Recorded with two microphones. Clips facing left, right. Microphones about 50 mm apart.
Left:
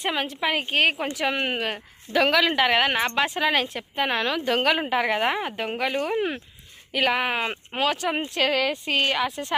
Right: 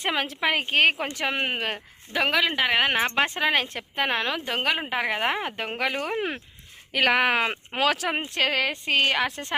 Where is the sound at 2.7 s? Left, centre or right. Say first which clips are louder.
Left 1 dB; centre.